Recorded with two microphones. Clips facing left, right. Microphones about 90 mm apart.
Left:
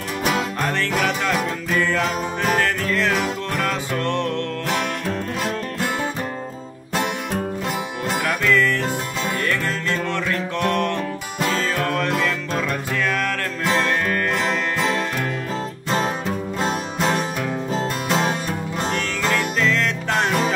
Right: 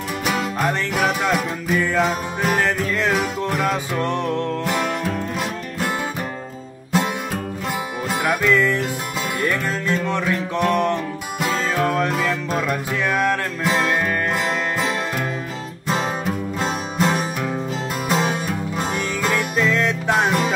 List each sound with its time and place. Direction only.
0.2 s music: centre (ahead or behind)
0.7 s music: 15° right (ahead or behind)
8.2 s music: 15° right (ahead or behind)
15.9 s music: centre (ahead or behind)